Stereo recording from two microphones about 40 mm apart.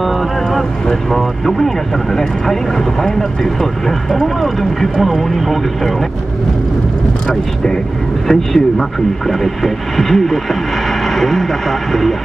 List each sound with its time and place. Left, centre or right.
0.0 s boat: centre
1.1 s speech: centre
7.2 s speech: centre